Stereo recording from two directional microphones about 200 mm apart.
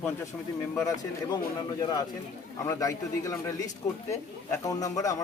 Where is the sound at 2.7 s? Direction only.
15° left (ahead or behind).